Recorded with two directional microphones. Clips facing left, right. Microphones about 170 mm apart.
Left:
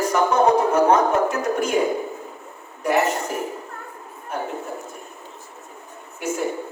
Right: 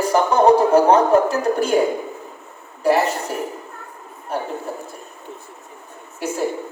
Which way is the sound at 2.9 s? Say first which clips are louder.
Right 4 dB; 35° right (ahead or behind).